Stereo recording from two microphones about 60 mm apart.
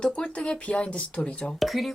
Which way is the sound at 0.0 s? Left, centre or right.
Centre.